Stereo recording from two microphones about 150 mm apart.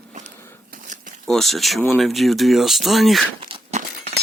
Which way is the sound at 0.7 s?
65° right (ahead or behind).